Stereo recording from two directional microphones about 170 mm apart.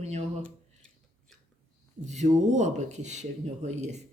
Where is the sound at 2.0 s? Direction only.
45° right (ahead or behind).